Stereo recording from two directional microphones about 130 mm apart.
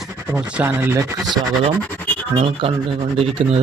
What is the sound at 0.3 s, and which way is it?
Speech, 15° right (ahead or behind).